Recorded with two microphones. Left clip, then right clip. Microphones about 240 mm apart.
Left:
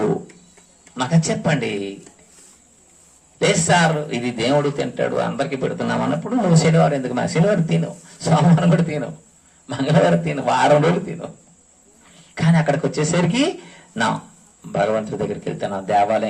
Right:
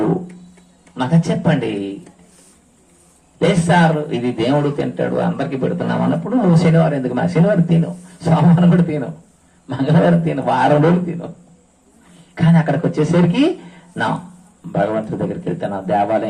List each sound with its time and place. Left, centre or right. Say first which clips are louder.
0.9 s a man's voice: right 2 dB; left
3.3 s a man's voice: right 1 dB; left
12.3 s a man's voice: right 1 dB; left
14.7 s a man's voice: right 1 dB; left